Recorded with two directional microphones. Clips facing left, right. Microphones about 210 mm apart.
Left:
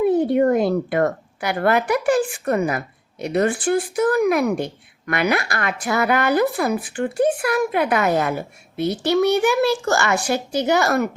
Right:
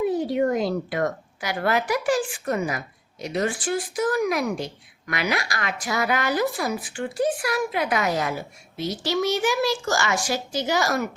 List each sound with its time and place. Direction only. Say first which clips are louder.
0.0 s a woman's voice: left 6 dB; 60° left (ahead or behind)